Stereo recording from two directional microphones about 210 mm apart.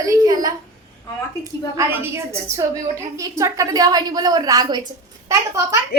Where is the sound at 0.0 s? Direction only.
15° right (ahead or behind).